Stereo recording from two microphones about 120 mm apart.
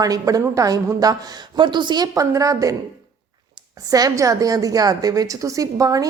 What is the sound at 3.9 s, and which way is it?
A woman's voice, 30° right (ahead or behind).